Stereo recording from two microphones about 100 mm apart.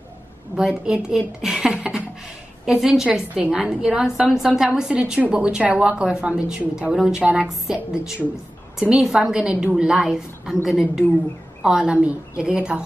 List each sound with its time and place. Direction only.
0.6 s a woman's voice: 10° right (ahead or behind)